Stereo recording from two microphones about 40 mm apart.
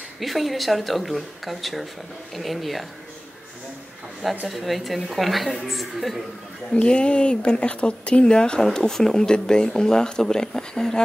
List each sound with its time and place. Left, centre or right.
0.2 s speech: centre
4.5 s speech: centre
6.7 s speech: left
8.6 s speech: centre